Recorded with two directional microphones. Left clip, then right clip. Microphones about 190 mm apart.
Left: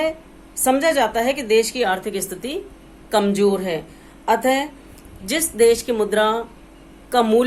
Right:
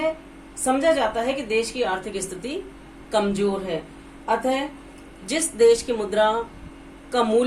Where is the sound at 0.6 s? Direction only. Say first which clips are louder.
Left 3 dB; 30° left (ahead or behind).